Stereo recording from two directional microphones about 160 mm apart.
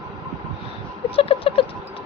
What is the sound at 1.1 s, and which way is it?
Speech, 35° left (ahead or behind).